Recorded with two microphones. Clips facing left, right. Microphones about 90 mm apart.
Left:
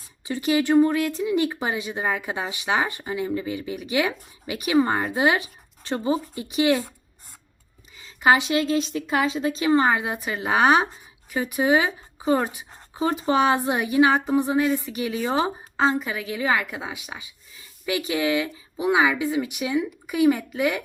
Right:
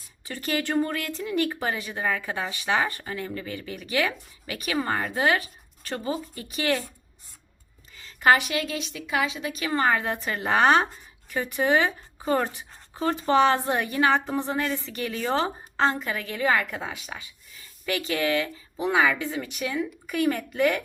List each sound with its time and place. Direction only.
0.3 s speech: 15° left (ahead or behind)
7.9 s speech: 15° left (ahead or behind)